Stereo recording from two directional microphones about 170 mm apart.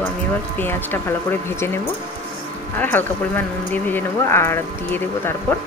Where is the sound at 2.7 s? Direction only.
10° left (ahead or behind).